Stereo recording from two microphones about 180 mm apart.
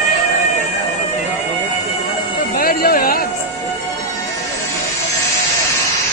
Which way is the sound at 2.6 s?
55° left (ahead or behind).